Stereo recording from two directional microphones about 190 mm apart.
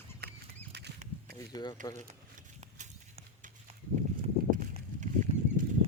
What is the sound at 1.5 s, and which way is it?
Speech, 20° left (ahead or behind).